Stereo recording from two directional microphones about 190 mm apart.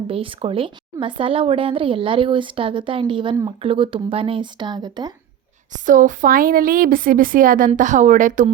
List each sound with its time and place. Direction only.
0.1 s speech: 30° right (ahead or behind)
5.7 s a woman's voice: 45° right (ahead or behind)